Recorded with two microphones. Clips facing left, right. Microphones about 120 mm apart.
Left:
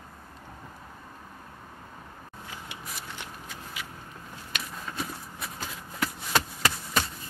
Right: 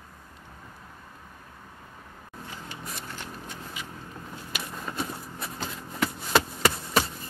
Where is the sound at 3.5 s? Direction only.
90° left.